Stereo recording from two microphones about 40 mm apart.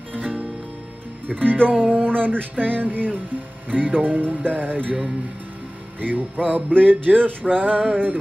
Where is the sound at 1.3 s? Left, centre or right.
Right.